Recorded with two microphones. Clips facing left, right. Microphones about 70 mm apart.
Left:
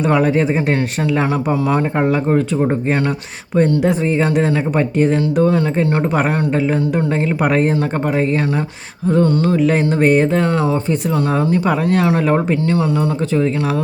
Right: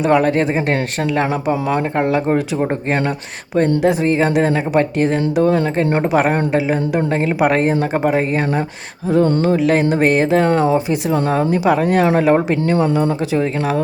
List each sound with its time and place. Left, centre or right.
0.0 s speech: centre
2.3 s a man's voice: centre
3.8 s speech: centre
5.8 s speech: right
6.1 s a man's voice: centre
7.7 s a man's voice: centre
9.0 s a man's voice: centre
12.6 s speech: right